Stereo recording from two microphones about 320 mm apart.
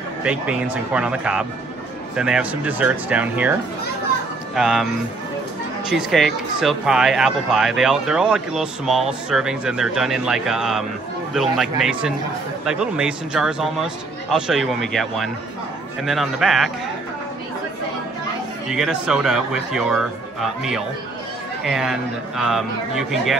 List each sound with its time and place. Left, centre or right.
0.2 s speech: centre
4.6 s speech: centre
5.9 s speech: centre
18.7 s speech: centre